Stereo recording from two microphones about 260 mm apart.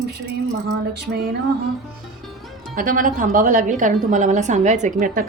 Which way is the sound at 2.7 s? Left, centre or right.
Right.